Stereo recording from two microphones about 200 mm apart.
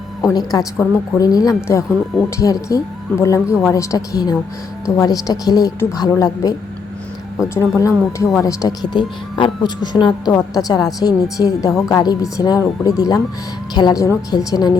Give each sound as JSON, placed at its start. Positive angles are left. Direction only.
{"t": 0.2, "sound": "a woman's voice", "side_deg": 20}